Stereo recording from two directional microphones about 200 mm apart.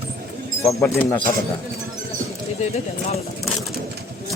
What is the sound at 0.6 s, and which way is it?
Speech, 15° left (ahead or behind).